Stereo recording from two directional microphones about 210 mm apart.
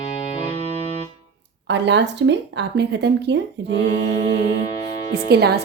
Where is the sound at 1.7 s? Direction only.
55° right (ahead or behind).